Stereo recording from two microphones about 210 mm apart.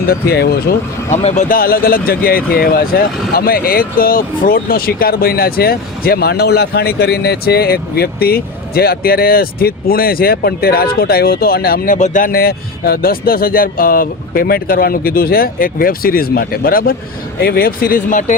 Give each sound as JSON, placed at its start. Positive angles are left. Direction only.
{"t": 0.0, "sound": "speech", "side_deg": 45}
{"t": 1.1, "sound": "speech", "side_deg": 35}